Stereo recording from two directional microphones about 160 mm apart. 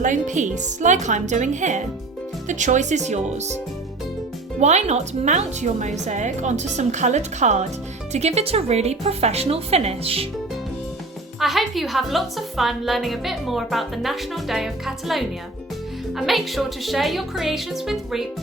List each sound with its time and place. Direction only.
0.0 s a woman's voice: 50° right (ahead or behind)
4.6 s a woman's voice: 45° right (ahead or behind)
11.3 s a woman's voice: centre (ahead or behind)